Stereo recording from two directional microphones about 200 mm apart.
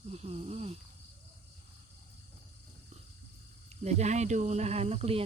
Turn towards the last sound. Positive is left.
turn(degrees=-30)  # may be behind; listen again after turning